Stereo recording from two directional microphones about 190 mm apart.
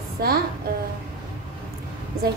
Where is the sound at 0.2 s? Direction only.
55° right (ahead or behind).